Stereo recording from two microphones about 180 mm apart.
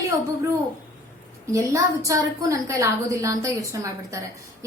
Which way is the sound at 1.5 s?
15° right (ahead or behind).